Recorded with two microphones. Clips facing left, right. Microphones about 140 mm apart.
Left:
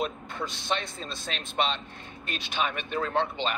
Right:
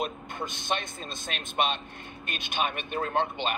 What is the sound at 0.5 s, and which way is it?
Speech, 50° right (ahead or behind).